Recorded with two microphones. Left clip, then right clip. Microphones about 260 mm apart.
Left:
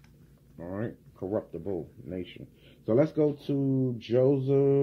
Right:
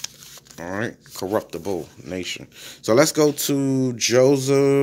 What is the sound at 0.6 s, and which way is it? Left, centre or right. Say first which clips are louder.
Speech: right 9 dB; right.